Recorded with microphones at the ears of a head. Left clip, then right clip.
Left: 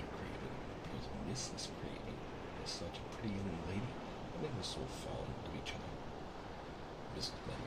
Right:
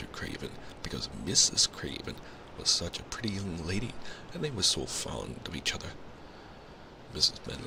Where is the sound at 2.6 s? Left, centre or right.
Right.